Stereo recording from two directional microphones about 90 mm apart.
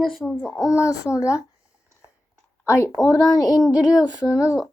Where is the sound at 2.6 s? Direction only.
30° left (ahead or behind).